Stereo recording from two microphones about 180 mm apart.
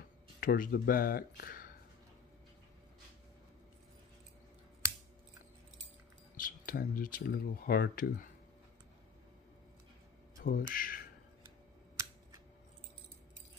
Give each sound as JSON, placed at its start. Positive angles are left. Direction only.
{"t": 0.4, "sound": "speech", "side_deg": 50}
{"t": 6.3, "sound": "speech", "side_deg": 50}
{"t": 10.4, "sound": "speech", "side_deg": 50}